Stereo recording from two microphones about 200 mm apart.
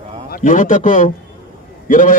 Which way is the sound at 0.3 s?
40° left (ahead or behind).